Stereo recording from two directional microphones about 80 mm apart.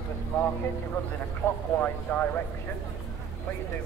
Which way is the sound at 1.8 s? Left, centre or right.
Left.